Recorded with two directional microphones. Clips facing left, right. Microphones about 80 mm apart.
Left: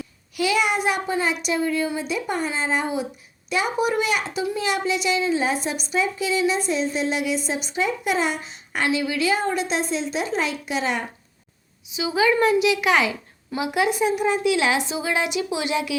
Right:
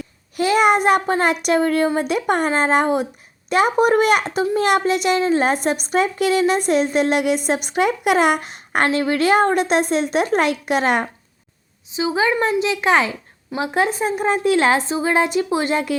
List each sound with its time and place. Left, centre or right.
0.0 s a child's voice: right
11.9 s a woman's voice: right